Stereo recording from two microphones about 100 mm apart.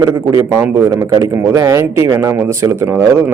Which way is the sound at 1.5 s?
30° right (ahead or behind).